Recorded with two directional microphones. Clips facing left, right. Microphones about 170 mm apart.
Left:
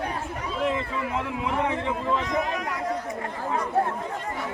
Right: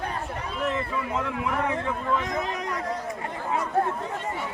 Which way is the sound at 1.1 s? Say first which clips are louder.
Even; 20° left (ahead or behind).